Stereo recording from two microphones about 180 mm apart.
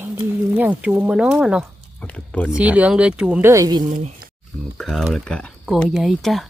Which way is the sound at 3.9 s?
40° right (ahead or behind).